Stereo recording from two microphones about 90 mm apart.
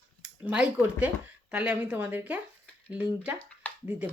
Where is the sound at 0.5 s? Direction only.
10° right (ahead or behind).